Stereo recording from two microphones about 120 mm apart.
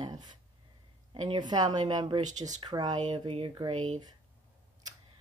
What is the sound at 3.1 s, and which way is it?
Speech, 45° right (ahead or behind).